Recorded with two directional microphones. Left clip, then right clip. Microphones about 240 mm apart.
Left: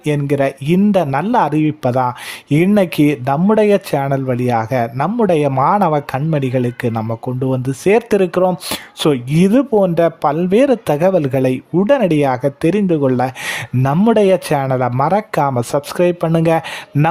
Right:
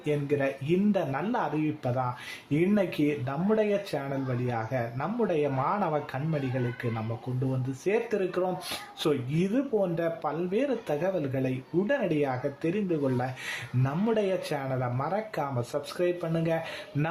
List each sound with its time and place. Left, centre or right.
0.0 s speech: left